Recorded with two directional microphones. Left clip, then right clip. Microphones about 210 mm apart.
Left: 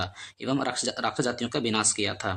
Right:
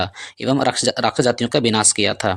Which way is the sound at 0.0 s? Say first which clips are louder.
Right 10 dB; 35° right (ahead or behind).